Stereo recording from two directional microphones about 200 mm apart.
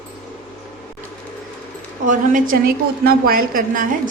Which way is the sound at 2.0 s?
40° right (ahead or behind).